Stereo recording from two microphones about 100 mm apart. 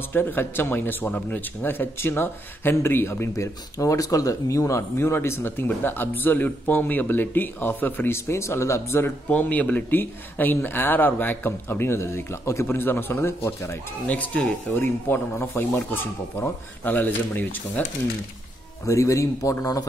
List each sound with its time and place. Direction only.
0.1 s speech: 20° left (ahead or behind)
9.3 s speech: 15° left (ahead or behind)
14.0 s speech: 15° left (ahead or behind)
18.9 s speech: 30° left (ahead or behind)